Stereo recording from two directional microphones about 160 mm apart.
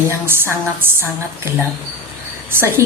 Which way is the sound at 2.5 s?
15° right (ahead or behind).